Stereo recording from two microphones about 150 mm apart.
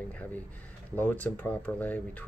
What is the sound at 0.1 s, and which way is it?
Speech, 10° left (ahead or behind).